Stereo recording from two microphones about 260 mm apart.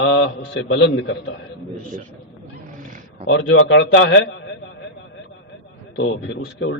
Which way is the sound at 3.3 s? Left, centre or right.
Left.